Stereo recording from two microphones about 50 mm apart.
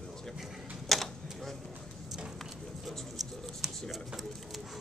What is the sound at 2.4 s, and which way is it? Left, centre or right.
Writing, centre.